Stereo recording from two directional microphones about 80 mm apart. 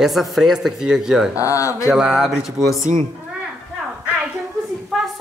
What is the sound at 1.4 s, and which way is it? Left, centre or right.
Speech, left.